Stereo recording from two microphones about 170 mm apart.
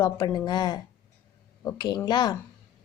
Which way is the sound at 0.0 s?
20° left (ahead or behind).